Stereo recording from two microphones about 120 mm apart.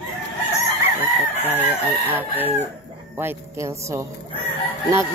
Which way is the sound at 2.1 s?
15° right (ahead or behind).